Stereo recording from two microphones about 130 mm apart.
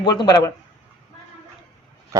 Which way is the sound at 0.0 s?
35° left (ahead or behind).